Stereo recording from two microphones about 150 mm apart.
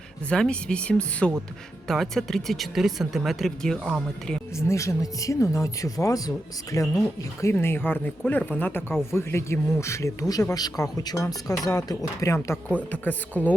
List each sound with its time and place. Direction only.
0.3 s speech: 5° left (ahead or behind)
4.5 s speech: 20° left (ahead or behind)